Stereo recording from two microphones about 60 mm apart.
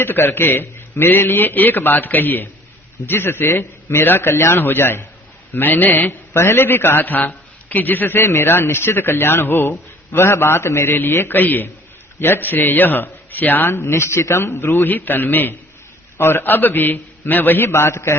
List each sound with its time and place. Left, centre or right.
0.0 s a man's voice: left
6.4 s a man's voice: left
8.2 s a man's voice: left
13.7 s a man's voice: left